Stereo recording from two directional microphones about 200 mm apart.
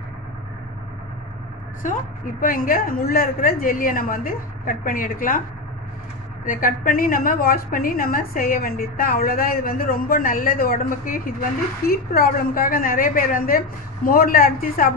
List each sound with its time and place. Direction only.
1.8 s a woman's voice: 40° left (ahead or behind)
6.4 s a woman's voice: 45° left (ahead or behind)